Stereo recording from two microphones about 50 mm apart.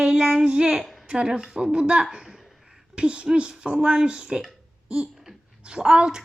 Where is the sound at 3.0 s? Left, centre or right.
Right.